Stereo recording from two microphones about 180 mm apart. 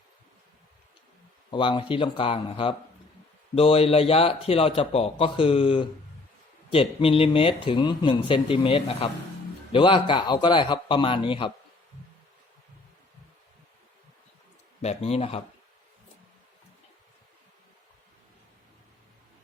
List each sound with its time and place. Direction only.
1.5 s speech: 25° left (ahead or behind)
14.8 s speech: 35° left (ahead or behind)